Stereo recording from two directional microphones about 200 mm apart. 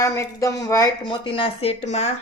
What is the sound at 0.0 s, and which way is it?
Speech, 15° left (ahead or behind).